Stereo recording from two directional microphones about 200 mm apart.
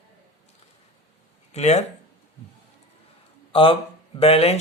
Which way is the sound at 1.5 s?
35° left (ahead or behind).